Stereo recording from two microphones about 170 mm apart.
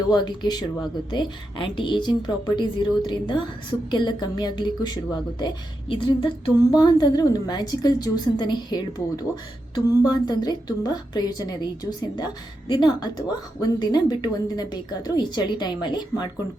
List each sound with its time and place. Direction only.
0.1 s a woman's voice: 25° left (ahead or behind)